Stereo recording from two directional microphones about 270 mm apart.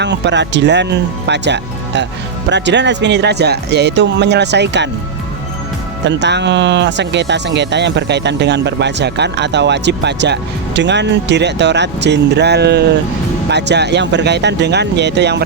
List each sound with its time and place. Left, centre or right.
0.0 s speech: right
6.1 s speech: right